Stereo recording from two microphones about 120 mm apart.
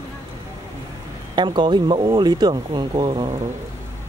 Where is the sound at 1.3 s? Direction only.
40° right (ahead or behind).